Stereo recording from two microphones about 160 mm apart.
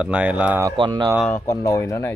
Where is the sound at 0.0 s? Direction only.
5° right (ahead or behind).